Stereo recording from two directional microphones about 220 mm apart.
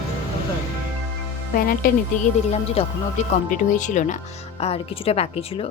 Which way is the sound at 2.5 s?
30° left (ahead or behind).